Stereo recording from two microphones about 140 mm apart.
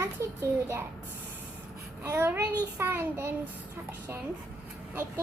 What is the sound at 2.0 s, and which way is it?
A child's voice, 15° right (ahead or behind).